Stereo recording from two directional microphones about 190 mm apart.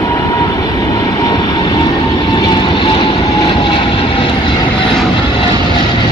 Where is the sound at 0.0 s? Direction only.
20° left (ahead or behind).